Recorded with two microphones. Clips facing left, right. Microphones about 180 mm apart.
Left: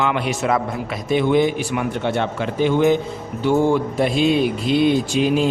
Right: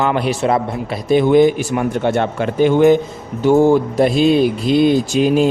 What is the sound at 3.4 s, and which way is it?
A man's voice, 40° right (ahead or behind).